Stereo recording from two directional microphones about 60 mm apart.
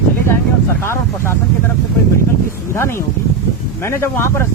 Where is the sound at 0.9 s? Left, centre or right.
Left.